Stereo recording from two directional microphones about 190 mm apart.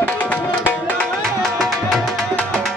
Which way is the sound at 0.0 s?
10° left (ahead or behind).